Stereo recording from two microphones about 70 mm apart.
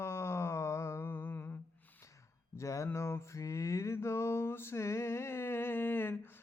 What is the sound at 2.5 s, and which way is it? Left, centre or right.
Mantra, left.